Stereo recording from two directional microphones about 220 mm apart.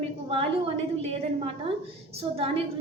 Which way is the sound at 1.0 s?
25° right (ahead or behind).